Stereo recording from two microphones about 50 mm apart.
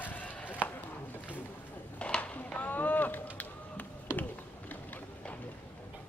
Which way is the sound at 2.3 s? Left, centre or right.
Left.